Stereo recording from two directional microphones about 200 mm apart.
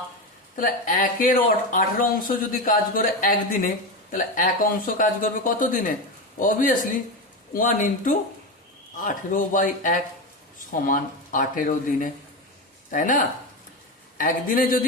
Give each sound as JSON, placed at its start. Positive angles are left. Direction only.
{"t": 0.5, "sound": "speech", "side_deg": 45}